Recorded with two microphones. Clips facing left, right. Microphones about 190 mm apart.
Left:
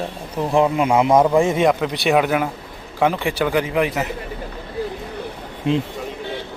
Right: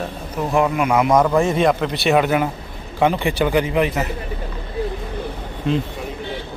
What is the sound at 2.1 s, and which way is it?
A man's voice, centre (ahead or behind).